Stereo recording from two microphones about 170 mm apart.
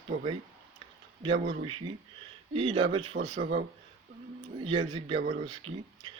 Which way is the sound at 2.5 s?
35° right (ahead or behind).